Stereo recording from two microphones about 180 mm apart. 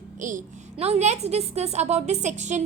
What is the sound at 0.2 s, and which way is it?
A woman's voice, 45° right (ahead or behind).